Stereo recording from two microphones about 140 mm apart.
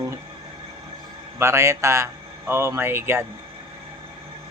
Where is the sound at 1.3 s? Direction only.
20° right (ahead or behind).